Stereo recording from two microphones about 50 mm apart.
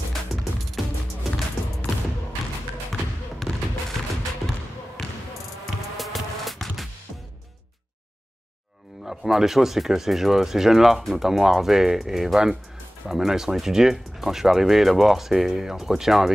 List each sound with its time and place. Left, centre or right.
0.3 s music: centre
2.9 s a sound: centre
5.9 s music: centre
9.0 s speech: centre